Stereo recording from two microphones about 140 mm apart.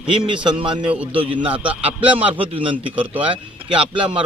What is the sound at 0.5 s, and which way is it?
Speech, 35° right (ahead or behind).